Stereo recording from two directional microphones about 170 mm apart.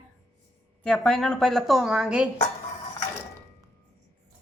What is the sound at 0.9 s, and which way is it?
A woman's voice, 5° left (ahead or behind).